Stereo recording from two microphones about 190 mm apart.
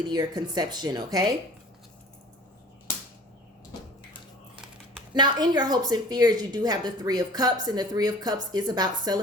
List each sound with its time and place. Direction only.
0.1 s speech: 20° right (ahead or behind)
5.1 s speech: 20° right (ahead or behind)